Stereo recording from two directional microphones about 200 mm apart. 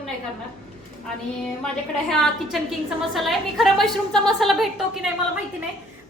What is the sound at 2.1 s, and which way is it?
A woman's voice, centre (ahead or behind).